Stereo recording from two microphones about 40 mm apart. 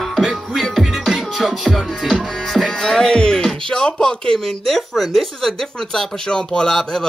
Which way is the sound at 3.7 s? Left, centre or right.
Centre.